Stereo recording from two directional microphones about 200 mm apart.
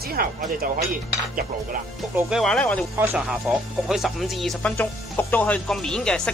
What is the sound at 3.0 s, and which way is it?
Speech, 10° right (ahead or behind).